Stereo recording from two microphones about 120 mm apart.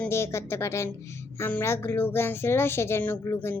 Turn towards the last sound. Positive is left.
turn(degrees=20)  # may be behind; listen again after turning